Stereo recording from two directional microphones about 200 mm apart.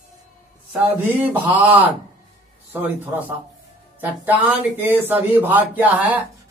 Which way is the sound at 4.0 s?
10° right (ahead or behind).